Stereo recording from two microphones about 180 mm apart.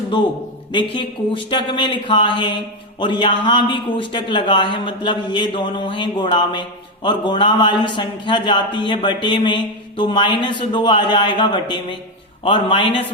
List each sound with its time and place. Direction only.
0.7 s a man's voice: 25° left (ahead or behind)